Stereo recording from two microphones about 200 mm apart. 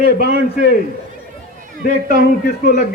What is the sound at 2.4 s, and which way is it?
Speech, 40° left (ahead or behind).